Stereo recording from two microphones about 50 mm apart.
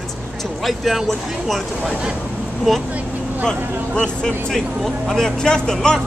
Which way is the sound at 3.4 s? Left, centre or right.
Centre.